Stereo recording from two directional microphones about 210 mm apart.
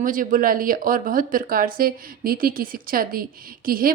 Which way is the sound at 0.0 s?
40° right (ahead or behind).